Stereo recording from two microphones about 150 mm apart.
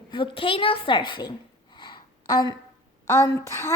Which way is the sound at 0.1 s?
35° left (ahead or behind).